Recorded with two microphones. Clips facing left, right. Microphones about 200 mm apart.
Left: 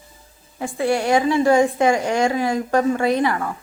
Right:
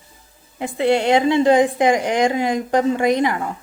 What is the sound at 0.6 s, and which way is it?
A woman's voice, 20° right (ahead or behind).